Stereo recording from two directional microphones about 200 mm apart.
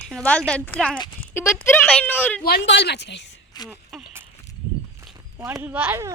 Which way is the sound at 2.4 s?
55° left (ahead or behind).